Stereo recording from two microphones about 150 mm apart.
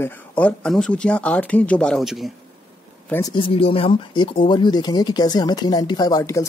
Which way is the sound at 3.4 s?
40° left (ahead or behind).